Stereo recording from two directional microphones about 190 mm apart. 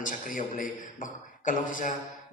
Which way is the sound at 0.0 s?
45° left (ahead or behind).